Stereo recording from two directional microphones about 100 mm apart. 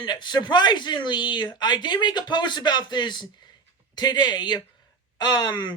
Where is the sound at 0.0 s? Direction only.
50° left (ahead or behind).